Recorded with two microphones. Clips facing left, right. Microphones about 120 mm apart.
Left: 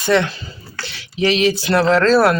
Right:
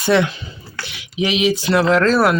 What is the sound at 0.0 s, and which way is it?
Speech, 15° right (ahead or behind).